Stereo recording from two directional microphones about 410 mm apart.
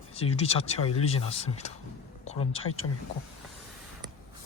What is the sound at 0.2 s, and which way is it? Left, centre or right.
Speech, centre.